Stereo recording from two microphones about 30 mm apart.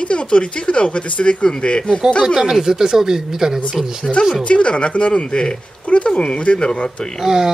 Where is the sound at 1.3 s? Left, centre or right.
Left.